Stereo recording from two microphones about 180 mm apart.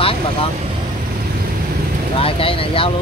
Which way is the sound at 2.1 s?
30° left (ahead or behind).